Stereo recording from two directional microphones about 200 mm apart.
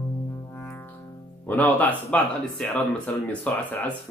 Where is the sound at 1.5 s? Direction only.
10° left (ahead or behind).